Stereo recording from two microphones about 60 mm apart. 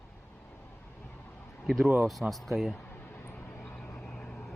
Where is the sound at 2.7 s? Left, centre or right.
Left.